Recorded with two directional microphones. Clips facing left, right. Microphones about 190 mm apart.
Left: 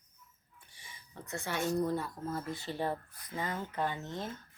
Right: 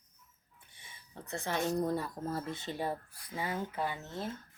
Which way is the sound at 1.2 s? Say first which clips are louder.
Right 1 dB; 30° right (ahead or behind).